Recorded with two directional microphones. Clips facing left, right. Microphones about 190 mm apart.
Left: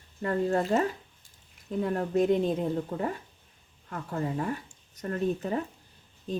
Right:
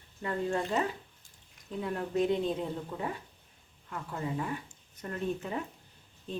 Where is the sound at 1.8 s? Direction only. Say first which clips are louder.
Left 4 dB; 45° left (ahead or behind).